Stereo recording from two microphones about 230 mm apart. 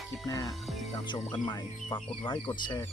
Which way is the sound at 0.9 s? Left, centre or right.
Centre.